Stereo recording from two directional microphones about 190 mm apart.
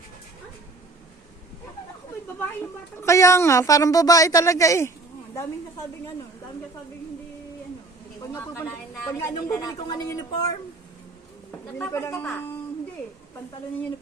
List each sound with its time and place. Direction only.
3.0 s a woman's voice: 15° left (ahead or behind)
8.2 s speech: 15° left (ahead or behind)
11.8 s a woman's voice: 15° left (ahead or behind)